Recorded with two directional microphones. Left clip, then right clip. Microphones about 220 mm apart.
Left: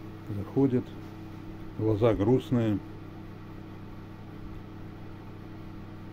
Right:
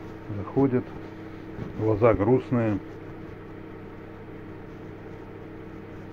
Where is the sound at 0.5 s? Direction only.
20° left (ahead or behind).